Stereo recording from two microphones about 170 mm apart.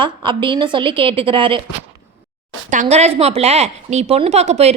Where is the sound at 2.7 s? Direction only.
45° right (ahead or behind).